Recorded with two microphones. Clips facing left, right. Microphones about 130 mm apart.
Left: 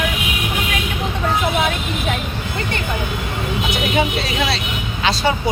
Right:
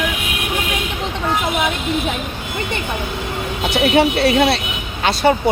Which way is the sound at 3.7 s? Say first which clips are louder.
Right 7 dB; 65° right (ahead or behind).